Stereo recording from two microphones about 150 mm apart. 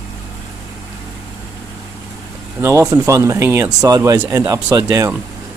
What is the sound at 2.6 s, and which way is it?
Speech, 20° right (ahead or behind).